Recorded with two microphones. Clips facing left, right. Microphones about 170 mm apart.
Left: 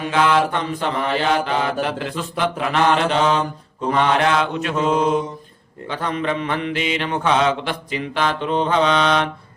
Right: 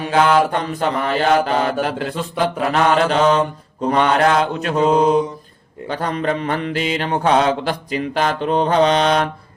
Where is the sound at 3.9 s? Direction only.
35° right (ahead or behind).